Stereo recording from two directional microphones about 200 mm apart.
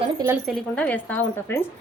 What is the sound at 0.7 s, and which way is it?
Speech, 5° left (ahead or behind).